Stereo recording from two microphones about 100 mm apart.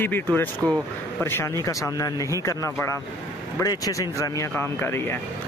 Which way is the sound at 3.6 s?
40° left (ahead or behind).